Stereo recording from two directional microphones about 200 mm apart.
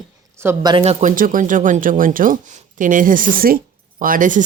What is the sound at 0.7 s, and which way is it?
Speech, 30° right (ahead or behind).